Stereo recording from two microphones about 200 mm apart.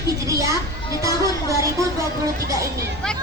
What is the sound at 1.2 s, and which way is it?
Speech, 15° left (ahead or behind).